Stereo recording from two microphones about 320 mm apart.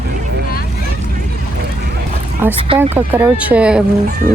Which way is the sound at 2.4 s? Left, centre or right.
Centre.